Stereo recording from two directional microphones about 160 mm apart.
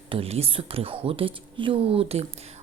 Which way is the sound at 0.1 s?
40° right (ahead or behind).